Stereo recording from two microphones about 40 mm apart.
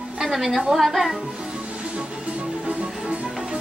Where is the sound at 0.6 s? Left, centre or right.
Centre.